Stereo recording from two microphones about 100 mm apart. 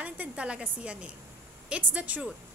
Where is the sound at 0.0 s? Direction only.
10° right (ahead or behind).